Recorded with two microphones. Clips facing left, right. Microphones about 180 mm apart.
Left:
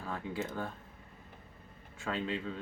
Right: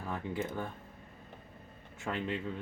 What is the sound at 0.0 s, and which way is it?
Speech, 20° right (ahead or behind).